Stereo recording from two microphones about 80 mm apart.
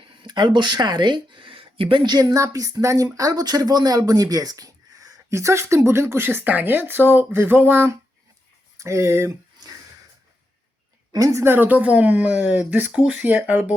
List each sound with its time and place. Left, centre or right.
0.0 s speech: right
2.3 s speech: right
11.1 s speech: right
11.4 s speech: right